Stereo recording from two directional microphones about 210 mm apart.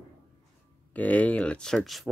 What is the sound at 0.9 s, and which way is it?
Speech, 5° left (ahead or behind).